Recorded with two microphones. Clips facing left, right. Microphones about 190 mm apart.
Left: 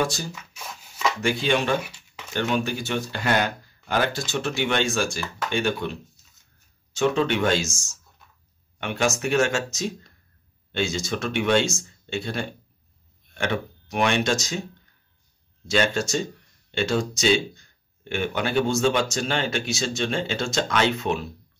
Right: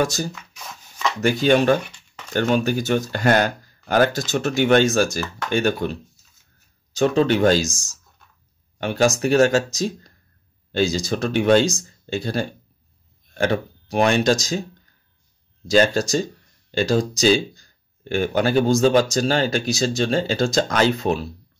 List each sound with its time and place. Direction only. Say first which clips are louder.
0.0 s speech: right 4 dB; 45° right (ahead or behind)
0.3 s a sound: right 1 dB; 5° left (ahead or behind)
1.2 s speech: right 8 dB; 40° right (ahead or behind)
1.8 s a sound: right 2 dB; 5° left (ahead or behind)
2.3 s speech: right 5 dB; 45° right (ahead or behind)
15.6 s speech: right 6 dB; 35° right (ahead or behind)